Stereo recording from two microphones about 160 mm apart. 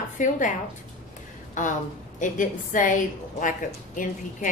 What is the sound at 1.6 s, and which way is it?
Speech, 50° left (ahead or behind).